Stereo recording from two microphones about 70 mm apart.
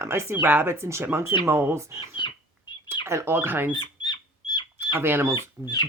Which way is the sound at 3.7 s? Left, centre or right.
Left.